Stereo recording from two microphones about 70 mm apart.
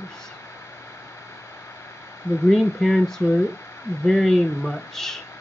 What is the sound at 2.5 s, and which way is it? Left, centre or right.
Speech, centre.